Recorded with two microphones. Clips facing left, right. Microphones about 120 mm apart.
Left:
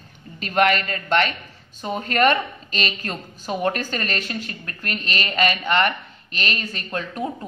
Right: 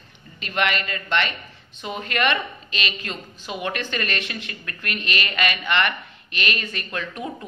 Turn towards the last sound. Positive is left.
turn(degrees=30)  # may be behind; listen again after turning